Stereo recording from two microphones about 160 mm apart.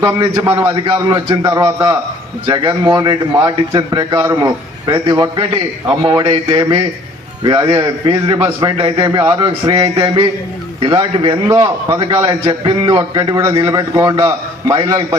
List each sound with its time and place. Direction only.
0.0 s a man's voice: 30° right (ahead or behind)
0.4 s a man's voice: 15° right (ahead or behind)
0.9 s a man's voice: 25° right (ahead or behind)
11.4 s a man's voice: 20° right (ahead or behind)